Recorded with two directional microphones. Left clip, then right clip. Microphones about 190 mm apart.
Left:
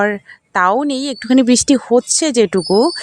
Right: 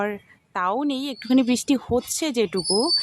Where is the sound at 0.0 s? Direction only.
35° left (ahead or behind).